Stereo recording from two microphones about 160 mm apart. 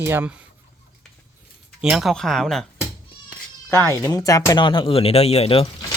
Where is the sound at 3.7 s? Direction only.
15° left (ahead or behind); by 5.6 s 35° left (ahead or behind).